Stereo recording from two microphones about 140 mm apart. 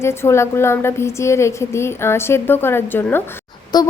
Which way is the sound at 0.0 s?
20° left (ahead or behind).